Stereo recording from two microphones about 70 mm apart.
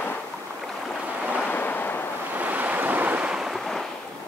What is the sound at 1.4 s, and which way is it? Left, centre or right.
Waves, left.